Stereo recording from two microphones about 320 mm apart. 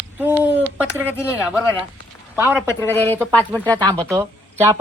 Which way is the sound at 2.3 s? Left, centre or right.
Centre.